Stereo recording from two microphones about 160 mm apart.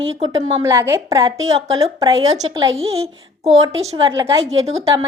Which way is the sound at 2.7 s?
40° right (ahead or behind).